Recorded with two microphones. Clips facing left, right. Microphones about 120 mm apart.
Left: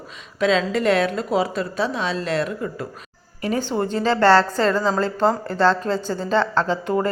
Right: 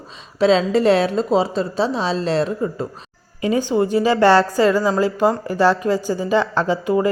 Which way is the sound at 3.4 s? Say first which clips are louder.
Right 5 dB; 15° right (ahead or behind).